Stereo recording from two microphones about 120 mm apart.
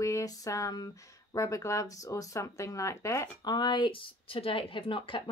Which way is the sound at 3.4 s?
35° left (ahead or behind).